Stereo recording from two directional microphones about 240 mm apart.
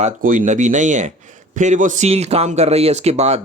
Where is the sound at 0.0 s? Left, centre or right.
Right.